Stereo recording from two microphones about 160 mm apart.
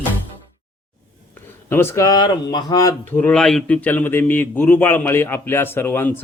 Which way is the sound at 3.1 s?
5° left (ahead or behind).